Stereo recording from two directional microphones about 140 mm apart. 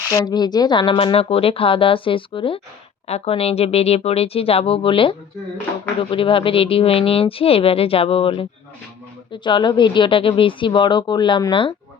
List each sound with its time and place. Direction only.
0.1 s speech: 25° left (ahead or behind)